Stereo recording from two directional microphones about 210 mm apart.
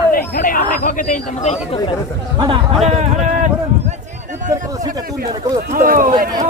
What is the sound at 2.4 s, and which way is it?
Speech, 25° right (ahead or behind).